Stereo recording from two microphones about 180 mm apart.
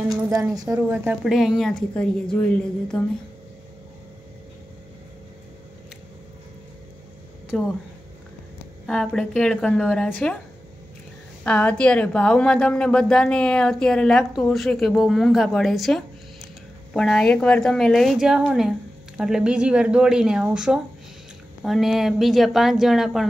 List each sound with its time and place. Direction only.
0.3 s speech: 20° right (ahead or behind)
1.2 s a woman's voice: centre (ahead or behind)
7.5 s a woman's voice: centre (ahead or behind)
8.8 s a woman's voice: 5° left (ahead or behind)
11.4 s a woman's voice: 10° left (ahead or behind)